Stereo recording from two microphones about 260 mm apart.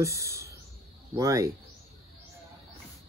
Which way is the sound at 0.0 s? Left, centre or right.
Centre.